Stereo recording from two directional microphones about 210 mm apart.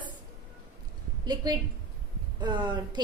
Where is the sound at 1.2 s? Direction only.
20° right (ahead or behind).